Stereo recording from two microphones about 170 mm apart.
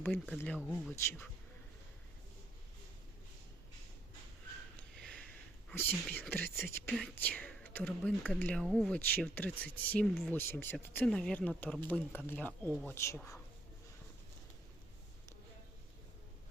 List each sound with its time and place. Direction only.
0.0 s speech: 5° left (ahead or behind)
4.8 s sniff: 5° left (ahead or behind)
5.6 s speech: 10° left (ahead or behind)